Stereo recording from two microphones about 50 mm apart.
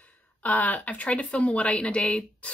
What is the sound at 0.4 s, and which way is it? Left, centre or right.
Speech, left.